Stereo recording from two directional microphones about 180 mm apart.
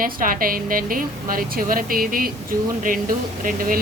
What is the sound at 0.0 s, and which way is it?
Speech, 50° right (ahead or behind).